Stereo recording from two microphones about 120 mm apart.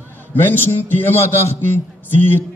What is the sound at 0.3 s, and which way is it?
A man's voice, 15° left (ahead or behind).